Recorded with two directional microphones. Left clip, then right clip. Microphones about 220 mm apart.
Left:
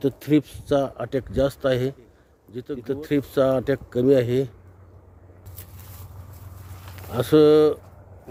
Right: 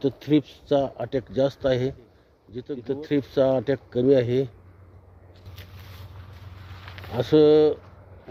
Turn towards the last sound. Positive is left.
turn(degrees=0)  # may be behind; listen again after turning